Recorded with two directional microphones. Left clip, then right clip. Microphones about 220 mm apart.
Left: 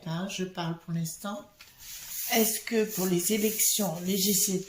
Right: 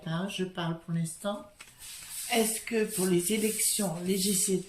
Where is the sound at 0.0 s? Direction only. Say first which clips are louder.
Even; 20° left (ahead or behind).